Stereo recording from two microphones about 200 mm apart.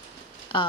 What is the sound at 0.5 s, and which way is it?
Speech, 25° left (ahead or behind).